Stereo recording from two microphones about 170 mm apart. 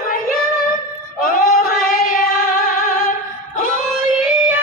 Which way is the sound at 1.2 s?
60° left (ahead or behind).